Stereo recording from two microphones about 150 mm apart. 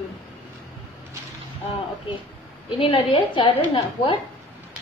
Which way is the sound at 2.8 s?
35° left (ahead or behind).